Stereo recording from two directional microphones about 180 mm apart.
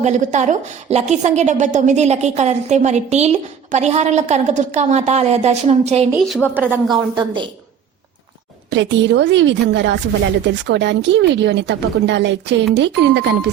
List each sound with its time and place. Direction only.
0.0 s a woman's voice: 40° right (ahead or behind)
6.1 s a woman's voice: centre (ahead or behind)
6.9 s a woman's voice: 25° right (ahead or behind)
8.7 s a woman's voice: 90° right